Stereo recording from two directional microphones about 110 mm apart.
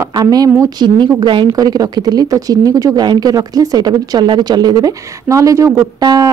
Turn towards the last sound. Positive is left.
turn(degrees=-35)  # may be behind; listen again after turning